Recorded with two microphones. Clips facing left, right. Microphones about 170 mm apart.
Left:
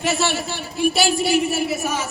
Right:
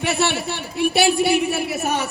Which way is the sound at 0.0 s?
60° right (ahead or behind).